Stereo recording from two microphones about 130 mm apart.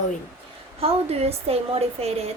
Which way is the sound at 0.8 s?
50° right (ahead or behind).